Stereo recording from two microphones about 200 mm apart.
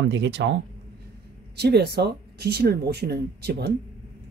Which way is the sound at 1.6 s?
55° right (ahead or behind).